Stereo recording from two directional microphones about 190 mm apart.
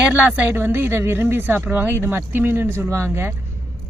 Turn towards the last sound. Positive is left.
turn(degrees=-10)  # may be behind; listen again after turning